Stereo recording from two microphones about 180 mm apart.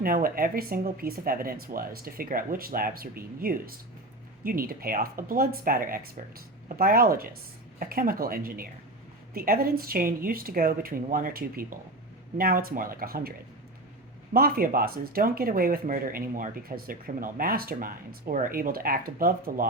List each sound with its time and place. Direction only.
0.0 s speech: 55° right (ahead or behind)
14.3 s speech: 55° right (ahead or behind)